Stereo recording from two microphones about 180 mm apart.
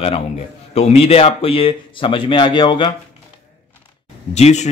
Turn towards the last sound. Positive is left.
turn(degrees=40)  # may be behind; listen again after turning